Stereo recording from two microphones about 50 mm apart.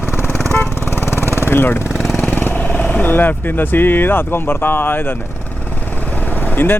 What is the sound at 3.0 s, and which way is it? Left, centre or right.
Speech, left.